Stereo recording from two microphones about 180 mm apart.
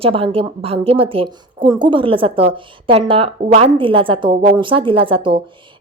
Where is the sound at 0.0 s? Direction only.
30° right (ahead or behind).